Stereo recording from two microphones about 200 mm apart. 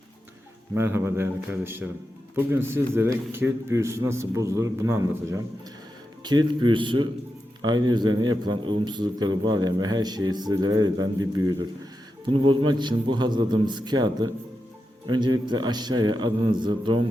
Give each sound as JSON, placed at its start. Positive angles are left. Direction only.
{"t": 0.7, "sound": "a man's voice", "side_deg": -10}